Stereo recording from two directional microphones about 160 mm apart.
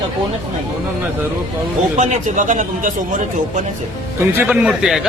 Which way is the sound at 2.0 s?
50° right (ahead or behind).